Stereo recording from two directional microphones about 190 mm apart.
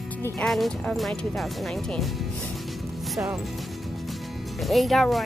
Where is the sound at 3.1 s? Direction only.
15° right (ahead or behind).